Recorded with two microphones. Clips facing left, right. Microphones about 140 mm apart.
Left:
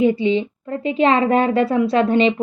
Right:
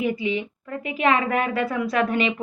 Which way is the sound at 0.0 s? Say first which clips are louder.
Left 8 dB; 30° left (ahead or behind).